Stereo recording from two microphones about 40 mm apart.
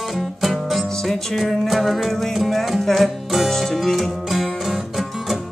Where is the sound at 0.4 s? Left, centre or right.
Centre.